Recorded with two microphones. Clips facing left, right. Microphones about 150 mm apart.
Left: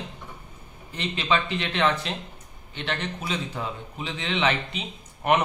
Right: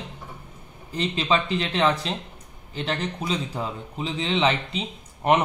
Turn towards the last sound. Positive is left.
turn(degrees=-30)  # may be behind; listen again after turning